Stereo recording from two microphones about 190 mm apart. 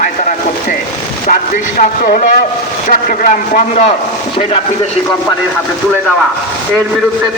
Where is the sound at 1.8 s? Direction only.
45° left (ahead or behind).